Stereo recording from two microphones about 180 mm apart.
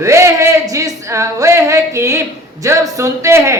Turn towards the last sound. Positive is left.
turn(degrees=-15)  # may be behind; listen again after turning